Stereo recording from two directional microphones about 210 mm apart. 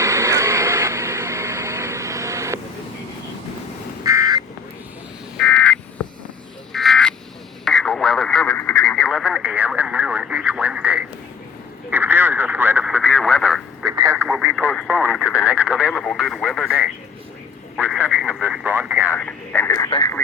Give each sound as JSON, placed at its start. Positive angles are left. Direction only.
{"t": 0.0, "sound": "vehicle", "side_deg": -15}
{"t": 4.0, "sound": "frog", "side_deg": -15}
{"t": 5.4, "sound": "frog", "side_deg": 5}
{"t": 7.6, "sound": "radio", "side_deg": 0}
{"t": 13.8, "sound": "a sound", "side_deg": -15}
{"t": 14.3, "sound": "radio", "side_deg": 0}
{"t": 17.7, "sound": "a sound", "side_deg": -5}
{"t": 19.1, "sound": "radio", "side_deg": 10}